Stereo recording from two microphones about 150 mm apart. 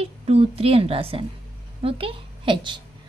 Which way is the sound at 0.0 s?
40° right (ahead or behind).